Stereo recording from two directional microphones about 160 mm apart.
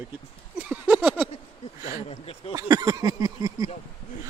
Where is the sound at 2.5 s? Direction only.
20° right (ahead or behind).